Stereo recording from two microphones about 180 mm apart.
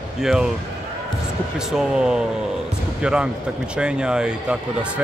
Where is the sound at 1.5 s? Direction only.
5° right (ahead or behind).